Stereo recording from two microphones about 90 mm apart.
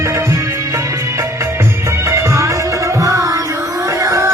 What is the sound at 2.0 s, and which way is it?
Music, 35° right (ahead or behind).